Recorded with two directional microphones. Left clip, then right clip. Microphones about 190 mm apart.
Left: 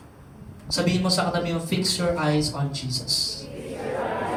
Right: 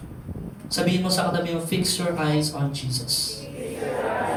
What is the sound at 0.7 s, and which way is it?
Speech, 25° left (ahead or behind).